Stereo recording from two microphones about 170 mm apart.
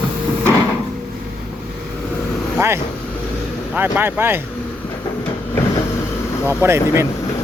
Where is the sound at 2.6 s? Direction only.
15° right (ahead or behind).